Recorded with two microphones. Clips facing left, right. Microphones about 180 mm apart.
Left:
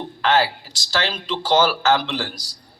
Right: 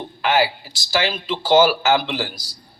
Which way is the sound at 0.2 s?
10° right (ahead or behind).